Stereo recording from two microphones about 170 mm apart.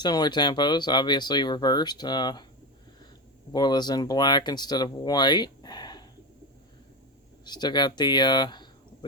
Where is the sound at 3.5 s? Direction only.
25° left (ahead or behind).